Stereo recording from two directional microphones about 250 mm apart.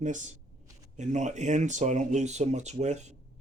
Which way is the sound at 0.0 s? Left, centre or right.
Right.